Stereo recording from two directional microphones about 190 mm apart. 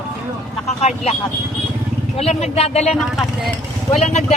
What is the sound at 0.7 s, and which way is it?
Speech, 35° left (ahead or behind).